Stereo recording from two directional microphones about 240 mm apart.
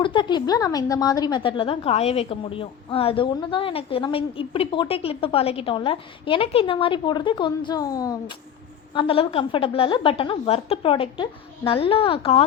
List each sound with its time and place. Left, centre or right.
0.0 s a woman's voice: centre